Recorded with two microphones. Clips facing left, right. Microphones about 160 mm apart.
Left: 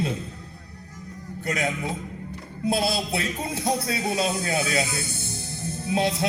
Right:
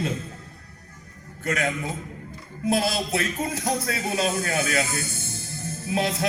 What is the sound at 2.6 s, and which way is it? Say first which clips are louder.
A man's voice: right 1 dB; 30° left (ahead or behind).